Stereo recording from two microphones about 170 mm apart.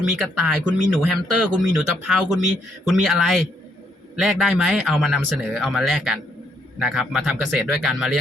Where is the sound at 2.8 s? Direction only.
Centre (ahead or behind).